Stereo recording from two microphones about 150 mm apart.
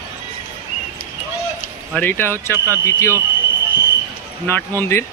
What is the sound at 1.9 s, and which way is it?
Speech, 15° left (ahead or behind).